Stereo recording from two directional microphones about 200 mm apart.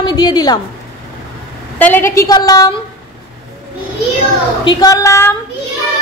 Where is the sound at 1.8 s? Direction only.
10° left (ahead or behind).